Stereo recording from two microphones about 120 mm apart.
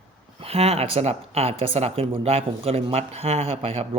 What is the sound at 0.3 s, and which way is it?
Speech, 55° right (ahead or behind).